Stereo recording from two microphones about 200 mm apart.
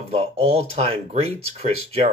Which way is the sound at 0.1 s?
30° right (ahead or behind).